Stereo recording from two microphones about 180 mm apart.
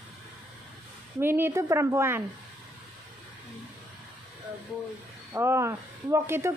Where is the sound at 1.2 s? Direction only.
10° right (ahead or behind).